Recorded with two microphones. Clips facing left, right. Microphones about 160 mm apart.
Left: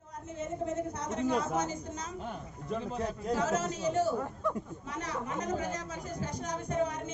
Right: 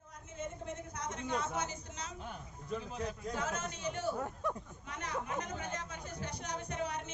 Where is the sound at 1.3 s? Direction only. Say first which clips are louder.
Left 5 dB; 40° left (ahead or behind).